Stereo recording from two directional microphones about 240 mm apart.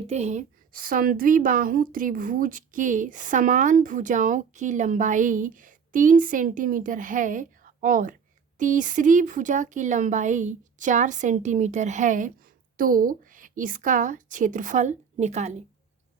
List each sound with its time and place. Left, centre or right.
0.1 s a woman's voice: right